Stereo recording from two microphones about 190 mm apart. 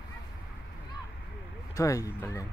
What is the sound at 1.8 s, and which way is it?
Speech, 15° left (ahead or behind).